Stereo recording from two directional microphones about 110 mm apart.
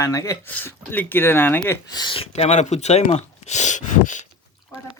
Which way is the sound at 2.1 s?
70° left (ahead or behind).